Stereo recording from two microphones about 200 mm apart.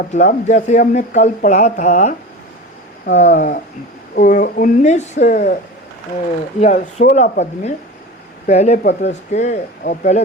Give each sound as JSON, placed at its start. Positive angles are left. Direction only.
{"t": 0.1, "sound": "speech", "side_deg": 35}
{"t": 6.6, "sound": "speech", "side_deg": 40}
{"t": 8.9, "sound": "speech", "side_deg": 55}
{"t": 9.3, "sound": "speech", "side_deg": 35}